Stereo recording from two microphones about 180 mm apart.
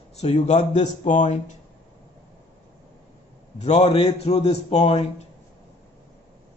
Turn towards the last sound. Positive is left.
turn(degrees=35)  # may be behind; listen again after turning